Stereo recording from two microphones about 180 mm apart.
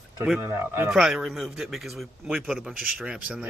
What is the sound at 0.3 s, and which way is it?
Speech, 10° right (ahead or behind).